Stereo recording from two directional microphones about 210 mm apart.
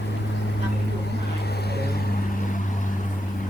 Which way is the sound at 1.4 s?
50° left (ahead or behind).